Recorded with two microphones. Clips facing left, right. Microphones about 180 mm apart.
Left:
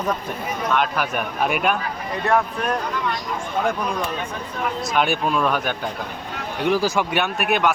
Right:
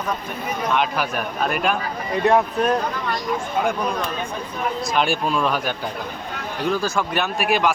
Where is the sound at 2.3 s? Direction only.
20° right (ahead or behind).